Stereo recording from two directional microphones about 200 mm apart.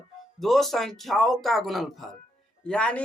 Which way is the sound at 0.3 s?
Centre (ahead or behind).